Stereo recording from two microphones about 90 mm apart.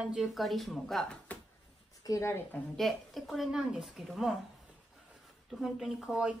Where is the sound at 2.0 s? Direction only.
35° left (ahead or behind).